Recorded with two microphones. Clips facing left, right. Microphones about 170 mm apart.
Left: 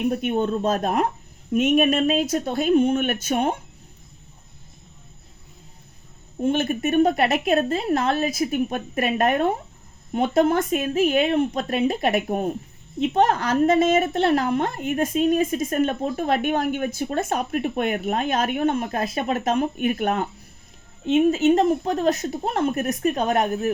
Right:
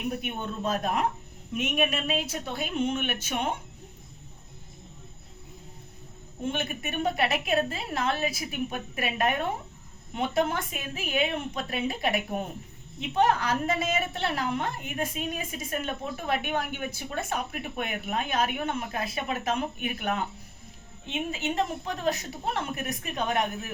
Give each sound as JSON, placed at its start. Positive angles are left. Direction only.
{"t": 0.1, "sound": "a woman's voice", "side_deg": 40}
{"t": 6.5, "sound": "a woman's voice", "side_deg": 45}